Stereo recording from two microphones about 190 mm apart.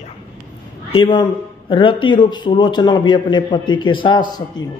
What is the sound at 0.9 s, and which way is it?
A man's voice, 25° left (ahead or behind).